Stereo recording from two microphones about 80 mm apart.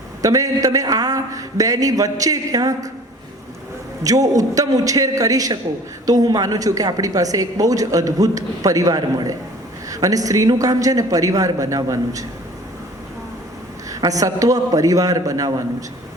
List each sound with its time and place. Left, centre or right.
0.2 s a woman's voice: right
4.0 s a woman's voice: right
14.0 s a woman's voice: right